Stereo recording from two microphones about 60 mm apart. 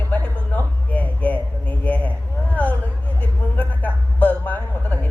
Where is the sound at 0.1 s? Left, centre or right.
Left.